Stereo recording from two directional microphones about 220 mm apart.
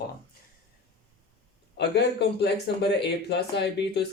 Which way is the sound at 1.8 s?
50° left (ahead or behind).